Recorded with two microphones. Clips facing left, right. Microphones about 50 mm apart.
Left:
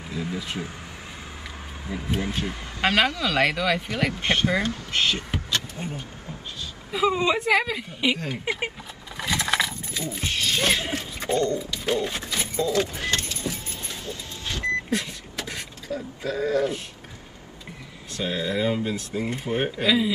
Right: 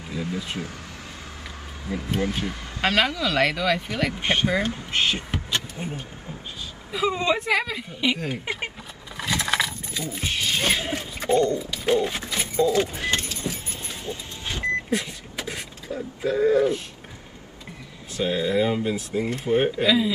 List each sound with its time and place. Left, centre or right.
2.0 s speech: centre
4.2 s speech: centre
5.5 s vehicle: centre
6.9 s speech: centre
8.5 s keys jangling: centre
10.2 s a sound: centre
12.6 s speech: centre
13.2 s vehicle: centre
14.0 s vehicle: right
14.9 s vehicle: centre
15.4 s a sound: centre
18.1 s speech: centre